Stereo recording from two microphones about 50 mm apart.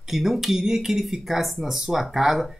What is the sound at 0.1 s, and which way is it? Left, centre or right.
Speech, centre.